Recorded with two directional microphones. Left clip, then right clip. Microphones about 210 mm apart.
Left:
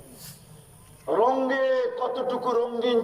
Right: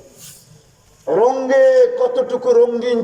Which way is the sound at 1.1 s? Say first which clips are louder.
Right 9 dB; 30° right (ahead or behind).